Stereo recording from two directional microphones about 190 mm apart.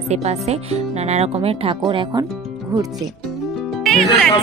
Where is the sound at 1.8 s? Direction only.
20° right (ahead or behind).